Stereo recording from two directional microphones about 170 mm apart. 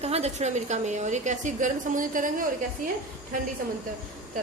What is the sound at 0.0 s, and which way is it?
A woman's voice, 40° right (ahead or behind).